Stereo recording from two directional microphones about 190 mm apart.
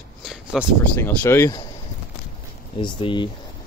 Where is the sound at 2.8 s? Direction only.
25° left (ahead or behind).